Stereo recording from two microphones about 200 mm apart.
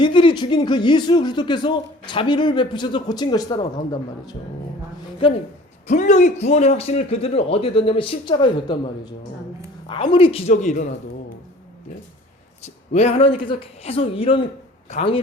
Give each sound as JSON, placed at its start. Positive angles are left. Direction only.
{"t": 0.0, "sound": "speech", "side_deg": 25}
{"t": 5.9, "sound": "speech", "side_deg": 40}
{"t": 10.1, "sound": "a man's voice", "side_deg": 25}
{"t": 12.6, "sound": "speech", "side_deg": 35}